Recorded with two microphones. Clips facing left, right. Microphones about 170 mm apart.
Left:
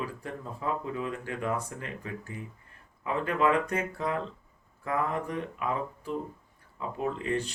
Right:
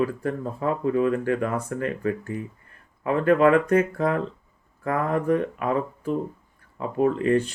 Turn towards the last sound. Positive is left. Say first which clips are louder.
# right 10 dB
turn(degrees=-55)  # may be behind; listen again after turning